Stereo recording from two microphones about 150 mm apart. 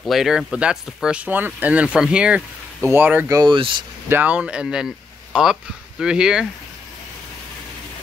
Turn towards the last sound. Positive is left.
turn(degrees=-5)  # may be behind; listen again after turning